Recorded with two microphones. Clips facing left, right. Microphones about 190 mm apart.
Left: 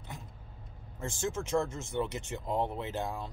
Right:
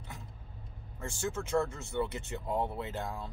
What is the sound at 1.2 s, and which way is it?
Speech, 15° left (ahead or behind).